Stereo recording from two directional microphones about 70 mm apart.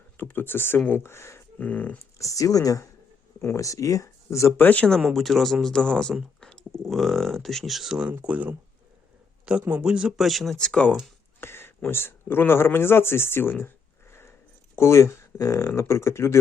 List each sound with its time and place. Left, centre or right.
0.2 s speech: left
1.5 s speech: centre
2.1 s speech: left
3.4 s speech: left
4.5 s speech: left
4.9 s a man's voice: centre
11.3 s speech: left
14.8 s speech: left